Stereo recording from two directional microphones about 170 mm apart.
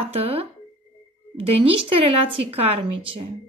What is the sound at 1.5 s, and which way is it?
A woman's voice, 35° right (ahead or behind).